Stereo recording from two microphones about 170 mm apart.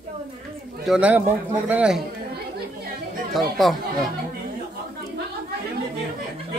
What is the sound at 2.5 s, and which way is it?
Chatter, 65° right (ahead or behind).